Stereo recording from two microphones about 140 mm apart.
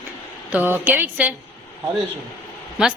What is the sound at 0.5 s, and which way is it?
Speech, 15° right (ahead or behind).